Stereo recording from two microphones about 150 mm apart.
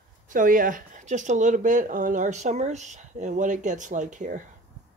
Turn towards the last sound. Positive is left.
turn(degrees=-55)  # may be behind; listen again after turning